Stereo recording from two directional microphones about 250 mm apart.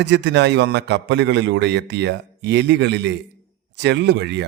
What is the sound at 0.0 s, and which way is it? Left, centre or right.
A man's voice, right.